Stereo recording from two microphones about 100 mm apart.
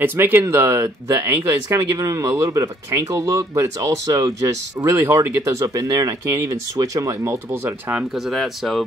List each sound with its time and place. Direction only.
0.0 s speech: 20° right (ahead or behind)
8.3 s speech: centre (ahead or behind)